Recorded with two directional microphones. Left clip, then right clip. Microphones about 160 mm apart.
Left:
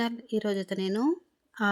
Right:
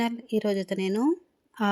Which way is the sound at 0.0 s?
15° right (ahead or behind).